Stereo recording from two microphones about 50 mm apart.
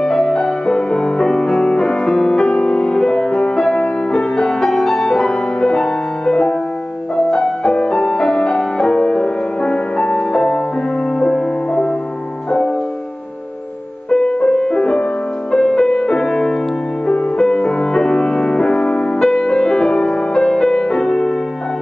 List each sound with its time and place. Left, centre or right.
0.0 s music: centre
14.1 s music: centre